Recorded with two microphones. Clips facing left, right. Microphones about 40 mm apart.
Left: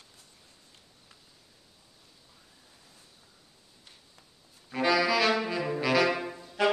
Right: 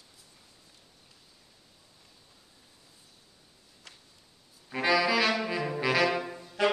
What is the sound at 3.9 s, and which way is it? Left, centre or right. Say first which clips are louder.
Walk: right 4 dB; right.